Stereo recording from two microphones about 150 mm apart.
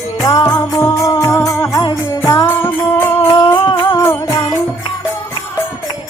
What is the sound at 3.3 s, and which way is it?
Music, 25° left (ahead or behind).